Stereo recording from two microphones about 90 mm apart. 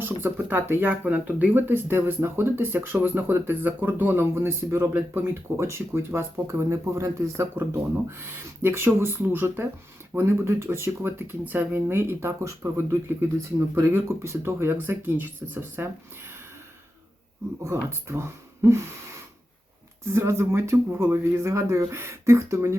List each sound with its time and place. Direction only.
0.0 s speech: 25° right (ahead or behind)
17.6 s speech: 30° right (ahead or behind)
20.1 s speech: 30° right (ahead or behind)